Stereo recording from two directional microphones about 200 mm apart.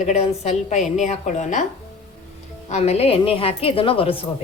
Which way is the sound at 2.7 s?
30° left (ahead or behind).